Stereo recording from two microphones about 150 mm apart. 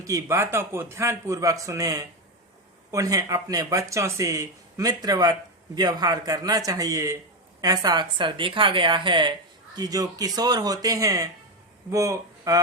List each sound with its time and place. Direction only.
0.0 s speech: 20° right (ahead or behind)